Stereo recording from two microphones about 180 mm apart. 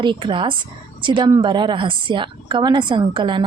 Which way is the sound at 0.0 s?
25° right (ahead or behind).